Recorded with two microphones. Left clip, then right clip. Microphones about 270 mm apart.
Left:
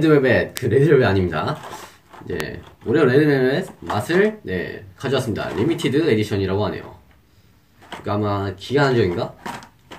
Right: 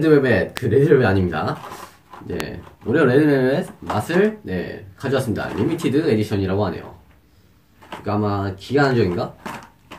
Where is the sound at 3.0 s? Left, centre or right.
Centre.